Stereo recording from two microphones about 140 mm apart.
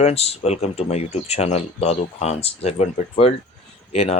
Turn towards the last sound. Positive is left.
turn(degrees=45)  # may be behind; listen again after turning